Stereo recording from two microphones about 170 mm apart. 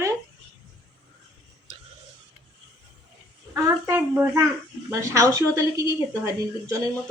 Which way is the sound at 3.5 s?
20° right (ahead or behind).